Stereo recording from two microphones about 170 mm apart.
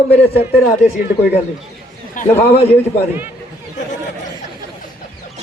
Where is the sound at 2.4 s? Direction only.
35° left (ahead or behind).